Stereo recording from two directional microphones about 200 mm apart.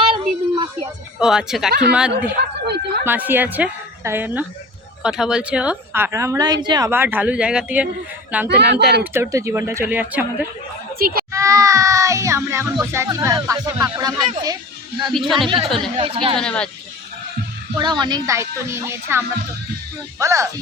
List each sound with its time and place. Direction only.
0.0 s a sound: 25° right (ahead or behind)
1.2 s speech: centre (ahead or behind)
2.2 s a sound: 55° right (ahead or behind)
3.0 s a woman's voice: 10° right (ahead or behind)
8.4 s speech: 55° right (ahead or behind)
9.1 s speech: 15° right (ahead or behind)
10.9 s children playing: 50° right (ahead or behind)
11.3 s a sound: 15° right (ahead or behind)
12.8 s speech: 15° right (ahead or behind)
15.1 s speech: centre (ahead or behind)
15.4 s speech: 25° right (ahead or behind)
16.4 s speech: 5° left (ahead or behind)
17.7 s speech: 20° right (ahead or behind)